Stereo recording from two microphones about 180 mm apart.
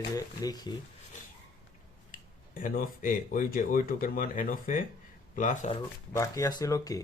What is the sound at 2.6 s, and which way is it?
Speech, 50° left (ahead or behind).